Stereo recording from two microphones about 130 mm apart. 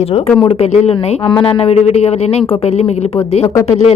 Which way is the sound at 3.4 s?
25° left (ahead or behind).